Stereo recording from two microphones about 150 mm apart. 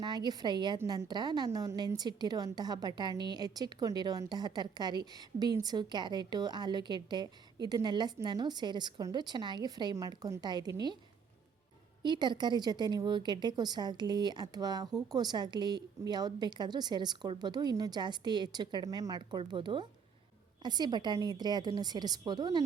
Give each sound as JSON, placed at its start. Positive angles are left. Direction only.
{"t": 0.0, "sound": "a woman's voice", "side_deg": -30}
{"t": 12.0, "sound": "a woman's voice", "side_deg": -30}